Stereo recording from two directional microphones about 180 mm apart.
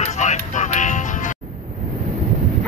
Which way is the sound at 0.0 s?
40° left (ahead or behind).